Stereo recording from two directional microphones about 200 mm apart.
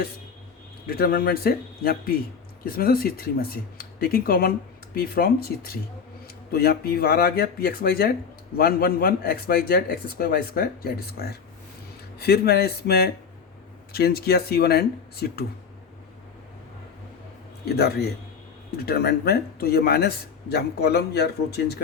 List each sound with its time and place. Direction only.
0.9 s speech: 50° left (ahead or behind)
17.7 s a man's voice: 55° left (ahead or behind)